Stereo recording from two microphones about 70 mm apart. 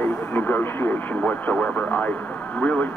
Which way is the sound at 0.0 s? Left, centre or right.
Left.